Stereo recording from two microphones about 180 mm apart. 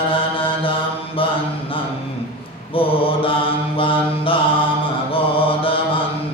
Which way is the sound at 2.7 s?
30° left (ahead or behind).